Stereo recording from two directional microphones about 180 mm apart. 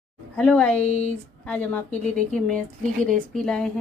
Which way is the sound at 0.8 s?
40° left (ahead or behind).